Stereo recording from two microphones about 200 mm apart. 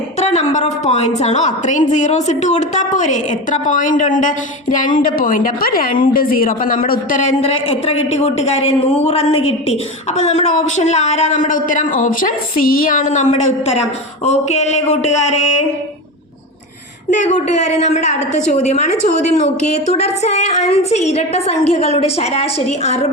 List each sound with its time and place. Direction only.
0.2 s a sound: 35° left (ahead or behind)
0.5 s a woman's voice: 35° left (ahead or behind)
17.1 s a woman's voice: 35° left (ahead or behind)